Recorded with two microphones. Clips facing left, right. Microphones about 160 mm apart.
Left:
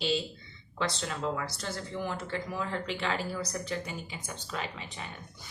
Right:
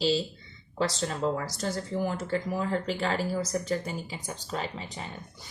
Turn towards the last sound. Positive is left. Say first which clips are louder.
# right 3 dB
turn(degrees=-35)  # may be behind; listen again after turning